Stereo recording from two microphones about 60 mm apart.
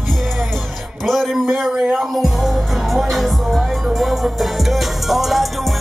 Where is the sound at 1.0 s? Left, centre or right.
Centre.